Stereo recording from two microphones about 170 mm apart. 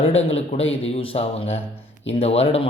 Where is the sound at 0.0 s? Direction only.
35° left (ahead or behind).